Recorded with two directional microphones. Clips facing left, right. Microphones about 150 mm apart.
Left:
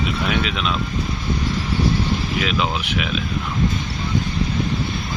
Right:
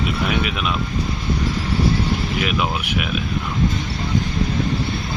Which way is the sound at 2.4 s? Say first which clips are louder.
Even; 10° right (ahead or behind).